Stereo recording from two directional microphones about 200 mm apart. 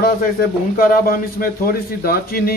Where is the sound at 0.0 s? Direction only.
45° left (ahead or behind).